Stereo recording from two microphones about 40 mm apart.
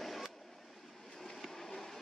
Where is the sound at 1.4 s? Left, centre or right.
Centre.